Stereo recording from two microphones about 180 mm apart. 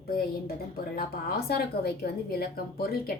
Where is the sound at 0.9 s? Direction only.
60° left (ahead or behind).